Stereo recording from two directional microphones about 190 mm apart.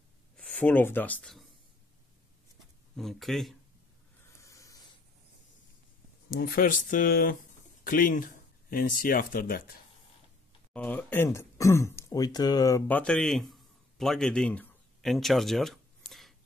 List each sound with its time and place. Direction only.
0.6 s speech: 10° left (ahead or behind)
3.0 s speech: centre (ahead or behind)
4.4 s snort: 15° left (ahead or behind)
6.3 s speech: 50° left (ahead or behind)
10.7 s speech: 10° left (ahead or behind)